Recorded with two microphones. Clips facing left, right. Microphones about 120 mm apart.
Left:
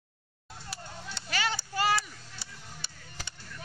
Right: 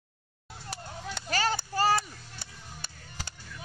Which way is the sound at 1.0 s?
45° right (ahead or behind).